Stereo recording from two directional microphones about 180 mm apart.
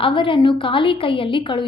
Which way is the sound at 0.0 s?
30° left (ahead or behind).